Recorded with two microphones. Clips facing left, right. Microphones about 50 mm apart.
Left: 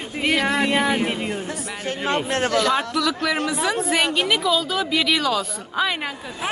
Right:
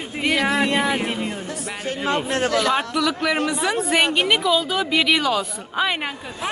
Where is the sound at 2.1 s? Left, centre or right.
Left.